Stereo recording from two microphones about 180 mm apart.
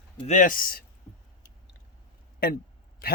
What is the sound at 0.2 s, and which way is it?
Speech, 45° left (ahead or behind).